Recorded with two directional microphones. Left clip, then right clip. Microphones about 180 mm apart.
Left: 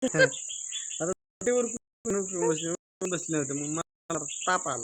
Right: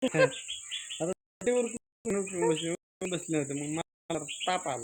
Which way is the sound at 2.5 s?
25° left (ahead or behind).